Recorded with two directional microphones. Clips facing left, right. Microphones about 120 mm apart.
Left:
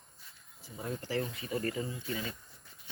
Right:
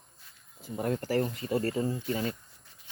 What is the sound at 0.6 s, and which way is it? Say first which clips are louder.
Speech: right 8 dB; 60° right (ahead or behind).